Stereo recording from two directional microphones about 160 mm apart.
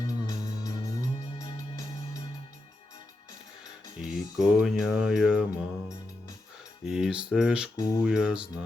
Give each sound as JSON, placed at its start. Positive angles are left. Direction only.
{"t": 0.0, "sound": "music", "side_deg": 20}
{"t": 4.0, "sound": "speech", "side_deg": -5}
{"t": 6.8, "sound": "speech", "side_deg": -5}
{"t": 7.8, "sound": "speech", "side_deg": 25}
{"t": 8.0, "sound": "speech", "side_deg": -5}